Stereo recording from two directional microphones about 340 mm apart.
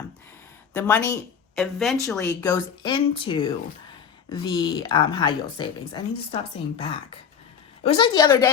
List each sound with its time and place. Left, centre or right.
0.7 s speech: centre